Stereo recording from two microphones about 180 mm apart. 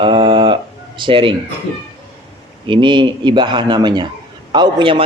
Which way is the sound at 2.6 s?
25° right (ahead or behind).